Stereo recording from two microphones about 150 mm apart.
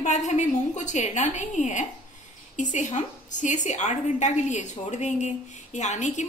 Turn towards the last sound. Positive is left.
turn(degrees=50)  # may be behind; listen again after turning